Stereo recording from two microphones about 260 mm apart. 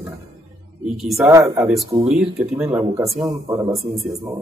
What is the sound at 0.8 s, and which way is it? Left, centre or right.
Speech, centre.